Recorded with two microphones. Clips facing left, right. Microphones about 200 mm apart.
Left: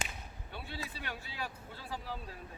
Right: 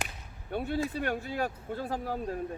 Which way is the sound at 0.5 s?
50° right (ahead or behind).